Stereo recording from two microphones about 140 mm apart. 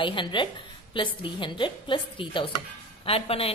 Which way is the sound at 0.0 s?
35° left (ahead or behind).